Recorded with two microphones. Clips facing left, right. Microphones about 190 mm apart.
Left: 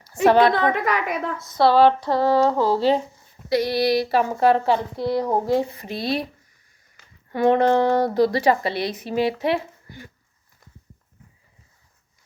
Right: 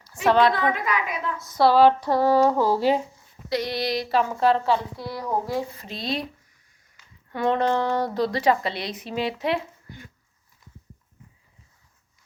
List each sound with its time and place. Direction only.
0.5 s a woman's voice: 65° left (ahead or behind)
1.4 s speech: 10° right (ahead or behind)
3.5 s a sound: 10° left (ahead or behind)
4.6 s speech: 20° left (ahead or behind)
7.5 s a woman's voice: 55° left (ahead or behind)
7.8 s speech: 15° left (ahead or behind)